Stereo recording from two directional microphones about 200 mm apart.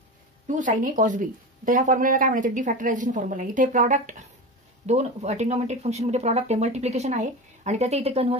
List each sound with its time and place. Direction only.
0.5 s speech: 40° right (ahead or behind)